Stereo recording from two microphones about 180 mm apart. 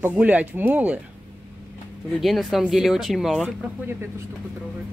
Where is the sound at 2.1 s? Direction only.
Centre (ahead or behind).